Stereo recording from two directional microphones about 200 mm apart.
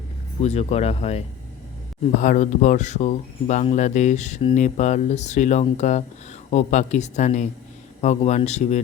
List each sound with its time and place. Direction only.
0.4 s speech: 30° left (ahead or behind)
2.2 s speech: 40° left (ahead or behind)